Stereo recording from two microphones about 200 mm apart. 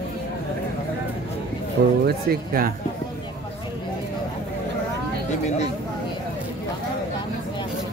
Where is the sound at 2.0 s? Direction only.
50° right (ahead or behind).